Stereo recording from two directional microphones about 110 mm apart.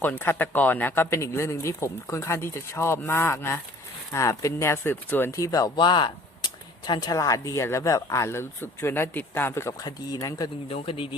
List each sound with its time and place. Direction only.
0.0 s speech: 20° left (ahead or behind)
5.5 s speech: 35° left (ahead or behind)
5.7 s speech: 45° left (ahead or behind)
10.7 s speech: 55° left (ahead or behind)